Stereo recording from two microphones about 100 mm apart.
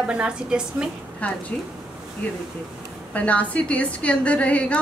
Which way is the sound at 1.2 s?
15° left (ahead or behind).